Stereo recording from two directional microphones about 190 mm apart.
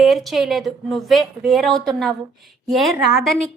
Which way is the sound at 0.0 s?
Centre (ahead or behind).